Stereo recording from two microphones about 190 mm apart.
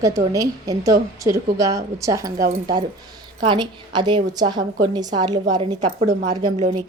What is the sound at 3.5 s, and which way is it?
A woman's voice, 25° right (ahead or behind).